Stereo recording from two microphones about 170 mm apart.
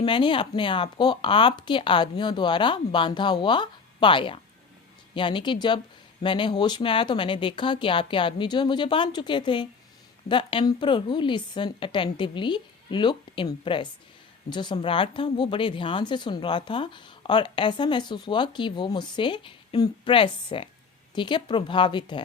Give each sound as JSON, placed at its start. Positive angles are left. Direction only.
{"t": 0.0, "sound": "speech", "side_deg": 30}